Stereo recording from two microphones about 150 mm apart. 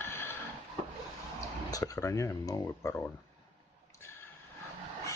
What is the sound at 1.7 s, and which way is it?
Speech, 25° left (ahead or behind).